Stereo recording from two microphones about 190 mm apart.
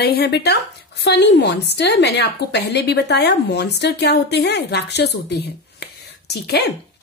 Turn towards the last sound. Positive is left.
turn(degrees=60)  # may be behind; listen again after turning